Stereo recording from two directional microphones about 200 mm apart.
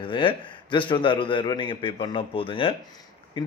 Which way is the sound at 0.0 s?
25° left (ahead or behind).